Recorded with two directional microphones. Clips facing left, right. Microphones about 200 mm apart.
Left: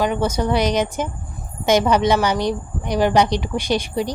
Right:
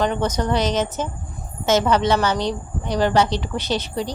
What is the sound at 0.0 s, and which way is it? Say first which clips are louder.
A woman's voice: left 1 dB; 10° left (ahead or behind).